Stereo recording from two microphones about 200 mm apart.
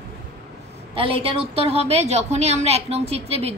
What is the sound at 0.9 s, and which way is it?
A woman's voice, 25° right (ahead or behind).